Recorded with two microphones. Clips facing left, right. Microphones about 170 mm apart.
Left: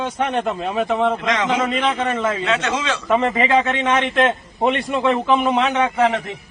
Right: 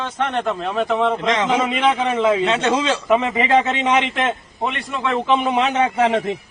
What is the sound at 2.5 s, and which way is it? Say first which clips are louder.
Speech: right 3 dB; 30° right (ahead or behind).